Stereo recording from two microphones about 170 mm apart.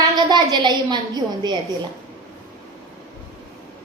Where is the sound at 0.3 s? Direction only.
25° right (ahead or behind).